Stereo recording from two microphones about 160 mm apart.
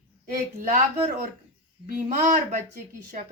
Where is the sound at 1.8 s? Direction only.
55° right (ahead or behind).